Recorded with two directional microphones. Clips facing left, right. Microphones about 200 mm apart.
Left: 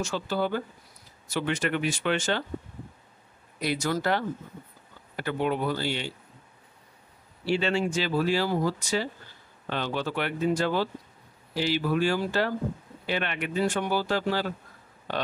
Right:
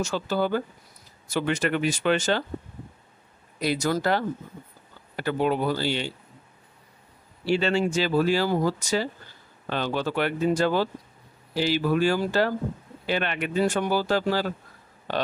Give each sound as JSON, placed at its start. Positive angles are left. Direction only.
{"t": 0.0, "sound": "speech", "side_deg": -45}
{"t": 3.6, "sound": "speech", "side_deg": -40}
{"t": 5.2, "sound": "speech", "side_deg": -35}
{"t": 7.6, "sound": "speech", "side_deg": -40}